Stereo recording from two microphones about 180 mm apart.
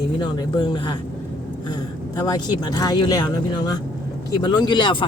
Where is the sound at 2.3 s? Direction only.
20° left (ahead or behind).